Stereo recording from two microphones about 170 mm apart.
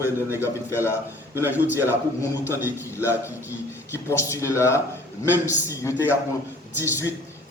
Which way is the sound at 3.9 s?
15° left (ahead or behind).